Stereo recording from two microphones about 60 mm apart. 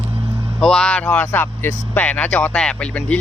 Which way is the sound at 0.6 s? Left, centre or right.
Centre.